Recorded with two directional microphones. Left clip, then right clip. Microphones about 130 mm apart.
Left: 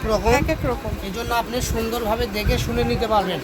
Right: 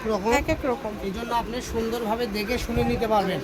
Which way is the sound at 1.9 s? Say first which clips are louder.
Left 4 dB; 35° left (ahead or behind).